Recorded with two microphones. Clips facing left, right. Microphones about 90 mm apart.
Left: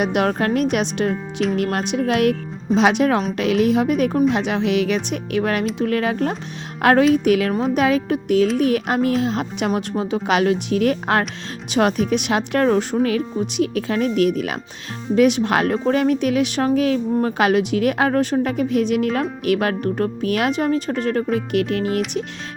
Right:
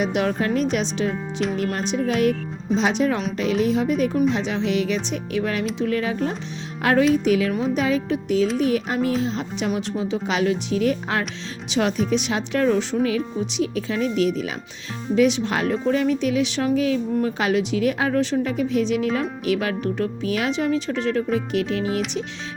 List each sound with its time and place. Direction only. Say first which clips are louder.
0.0 s speech: left 3 dB; 55° left (ahead or behind)
1.1 s speech: left 3 dB; centre (ahead or behind)
1.5 s speech: left 3 dB; 60° left (ahead or behind)